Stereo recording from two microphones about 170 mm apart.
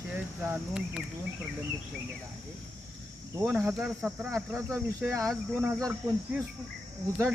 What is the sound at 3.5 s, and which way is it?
Speech, 10° right (ahead or behind).